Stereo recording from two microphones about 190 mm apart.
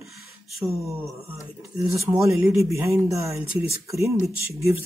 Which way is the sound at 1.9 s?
15° right (ahead or behind).